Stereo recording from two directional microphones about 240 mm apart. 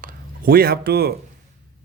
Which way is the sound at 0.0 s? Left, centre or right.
Right.